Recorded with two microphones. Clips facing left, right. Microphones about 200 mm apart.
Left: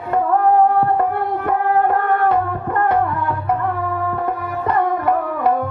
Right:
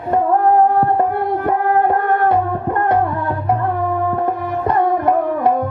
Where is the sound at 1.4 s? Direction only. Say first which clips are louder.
Right 1 dB; 20° right (ahead or behind).